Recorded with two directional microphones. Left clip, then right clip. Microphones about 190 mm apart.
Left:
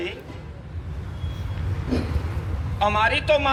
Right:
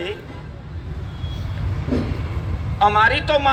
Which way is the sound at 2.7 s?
25° left (ahead or behind).